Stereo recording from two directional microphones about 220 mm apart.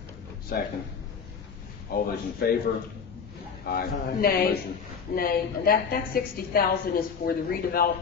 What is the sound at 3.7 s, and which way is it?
A woman's voice, 40° left (ahead or behind).